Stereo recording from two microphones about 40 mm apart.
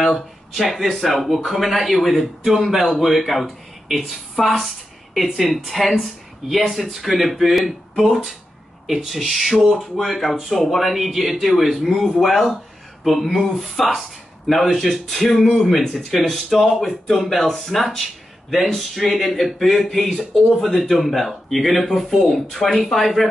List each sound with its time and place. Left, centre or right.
0.6 s a woman's voice: centre
8.8 s speech: centre